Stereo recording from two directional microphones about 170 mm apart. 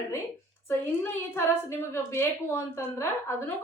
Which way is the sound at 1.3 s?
15° left (ahead or behind).